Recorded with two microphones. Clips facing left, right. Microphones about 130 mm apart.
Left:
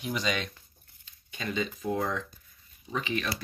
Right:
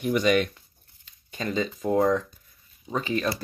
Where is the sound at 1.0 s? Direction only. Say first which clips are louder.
Right 5 dB; 40° right (ahead or behind).